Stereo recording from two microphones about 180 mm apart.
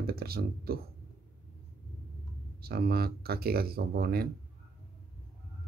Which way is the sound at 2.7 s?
60° right (ahead or behind).